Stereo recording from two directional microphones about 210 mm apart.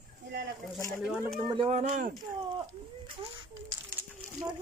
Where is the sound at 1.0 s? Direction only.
5° right (ahead or behind).